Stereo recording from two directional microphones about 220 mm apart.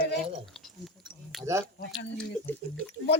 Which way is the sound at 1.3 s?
Centre (ahead or behind).